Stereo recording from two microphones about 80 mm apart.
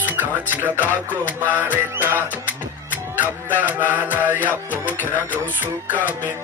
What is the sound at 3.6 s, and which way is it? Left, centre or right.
Music, right.